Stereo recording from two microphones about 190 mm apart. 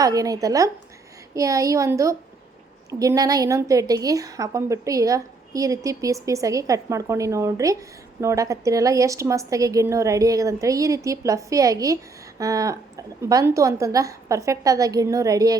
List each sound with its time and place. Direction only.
0.0 s a woman's voice: 20° right (ahead or behind)